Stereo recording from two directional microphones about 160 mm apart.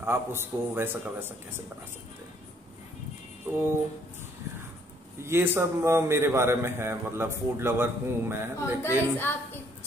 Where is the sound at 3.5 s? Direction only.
15° right (ahead or behind).